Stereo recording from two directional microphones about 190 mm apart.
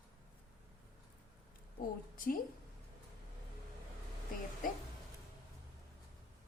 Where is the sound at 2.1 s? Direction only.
45° left (ahead or behind).